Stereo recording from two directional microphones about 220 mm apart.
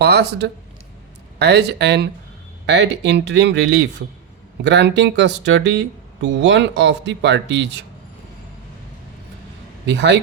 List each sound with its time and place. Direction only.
0.0 s speech: 50° right (ahead or behind)
9.8 s speech: 50° right (ahead or behind)